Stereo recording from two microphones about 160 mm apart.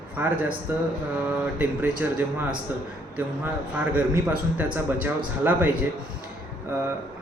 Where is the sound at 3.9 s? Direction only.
10° right (ahead or behind).